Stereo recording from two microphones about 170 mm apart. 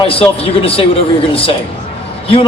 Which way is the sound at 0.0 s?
35° left (ahead or behind).